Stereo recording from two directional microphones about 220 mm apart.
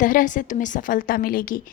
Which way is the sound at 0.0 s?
35° left (ahead or behind).